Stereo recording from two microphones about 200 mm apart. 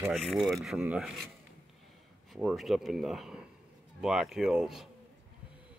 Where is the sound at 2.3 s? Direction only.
5° right (ahead or behind).